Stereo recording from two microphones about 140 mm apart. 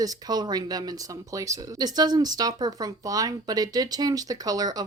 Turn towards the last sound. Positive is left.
turn(degrees=-25)  # may be behind; listen again after turning